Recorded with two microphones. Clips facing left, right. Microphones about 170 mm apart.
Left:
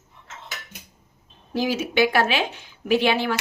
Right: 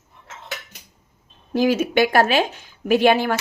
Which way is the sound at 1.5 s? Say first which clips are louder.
Right 6 dB; 50° right (ahead or behind).